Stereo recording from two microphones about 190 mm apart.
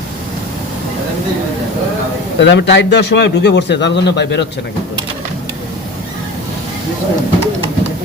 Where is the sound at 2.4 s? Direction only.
65° left (ahead or behind).